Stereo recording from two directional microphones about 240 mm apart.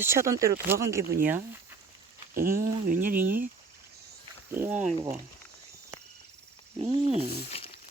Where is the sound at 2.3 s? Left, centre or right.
Right.